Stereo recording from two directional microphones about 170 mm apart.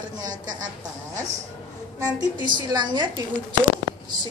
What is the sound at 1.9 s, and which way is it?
A woman's voice, 25° right (ahead or behind).